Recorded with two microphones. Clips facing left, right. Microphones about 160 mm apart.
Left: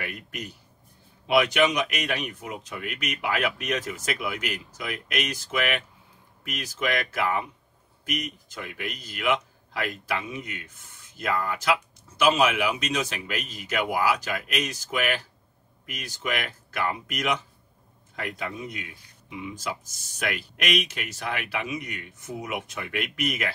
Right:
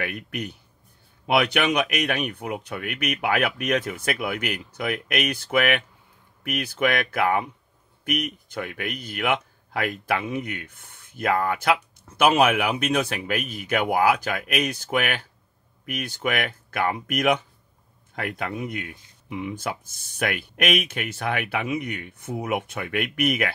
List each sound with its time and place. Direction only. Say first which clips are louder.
0.0 s a man's voice: right 5 dB; 60° right (ahead or behind)